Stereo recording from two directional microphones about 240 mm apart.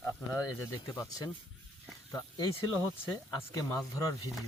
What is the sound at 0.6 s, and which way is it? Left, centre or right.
Speech, centre.